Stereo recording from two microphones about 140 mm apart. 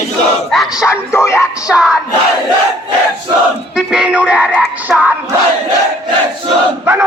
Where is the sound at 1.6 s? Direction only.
5° right (ahead or behind).